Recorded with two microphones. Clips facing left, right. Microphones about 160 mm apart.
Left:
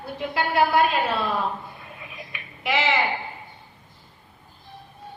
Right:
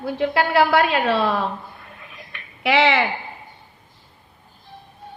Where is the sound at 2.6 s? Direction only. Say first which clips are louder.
Right 6 dB; 75° right (ahead or behind).